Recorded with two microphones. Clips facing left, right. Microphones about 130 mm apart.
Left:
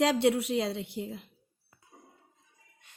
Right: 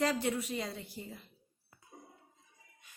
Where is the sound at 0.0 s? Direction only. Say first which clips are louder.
Left 7 dB; 80° left.